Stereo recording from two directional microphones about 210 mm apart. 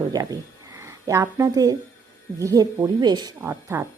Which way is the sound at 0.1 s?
15° right (ahead or behind).